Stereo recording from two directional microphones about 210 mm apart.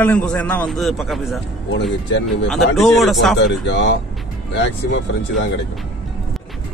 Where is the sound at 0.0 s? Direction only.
5° left (ahead or behind).